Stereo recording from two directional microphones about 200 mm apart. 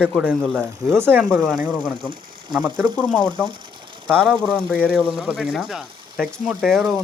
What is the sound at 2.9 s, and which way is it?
Speech, 5° left (ahead or behind).